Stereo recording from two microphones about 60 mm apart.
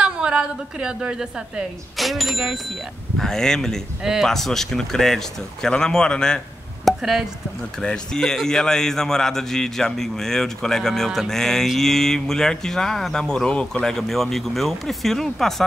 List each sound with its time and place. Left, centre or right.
0.0 s a woman's voice: centre
2.0 s speech: centre
3.2 s a man's voice: centre
4.0 s speech: centre
4.3 s a man's voice: centre
6.8 s chop: centre
7.8 s a man's voice: centre